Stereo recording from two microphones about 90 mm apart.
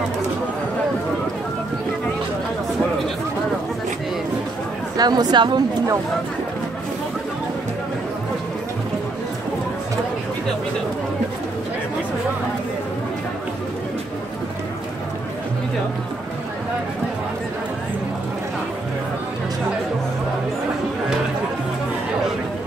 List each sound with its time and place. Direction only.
4.9 s speech: 50° right (ahead or behind)